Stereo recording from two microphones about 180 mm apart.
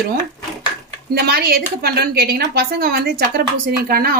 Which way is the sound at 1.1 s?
60° right (ahead or behind).